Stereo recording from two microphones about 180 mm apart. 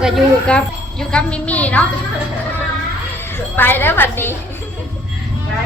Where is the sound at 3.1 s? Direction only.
10° left (ahead or behind).